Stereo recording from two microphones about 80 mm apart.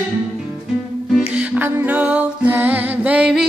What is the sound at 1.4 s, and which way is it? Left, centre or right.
Music, right.